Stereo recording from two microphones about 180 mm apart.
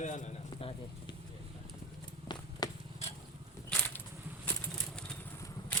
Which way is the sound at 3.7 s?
10° left (ahead or behind).